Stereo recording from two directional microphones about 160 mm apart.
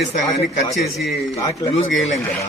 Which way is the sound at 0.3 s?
45° left (ahead or behind).